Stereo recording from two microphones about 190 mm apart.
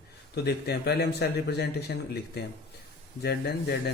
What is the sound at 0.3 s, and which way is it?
Speech, 60° left (ahead or behind).